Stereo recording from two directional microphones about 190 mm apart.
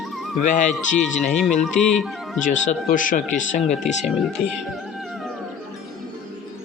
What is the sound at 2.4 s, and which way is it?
A man's voice, 45° left (ahead or behind).